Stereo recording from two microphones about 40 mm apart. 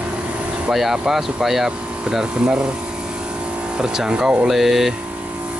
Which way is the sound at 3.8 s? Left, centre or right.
Right.